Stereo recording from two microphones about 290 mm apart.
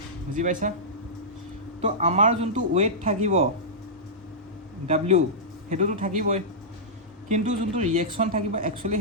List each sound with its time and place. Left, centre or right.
0.3 s speech: right
1.8 s speech: right
4.9 s speech: right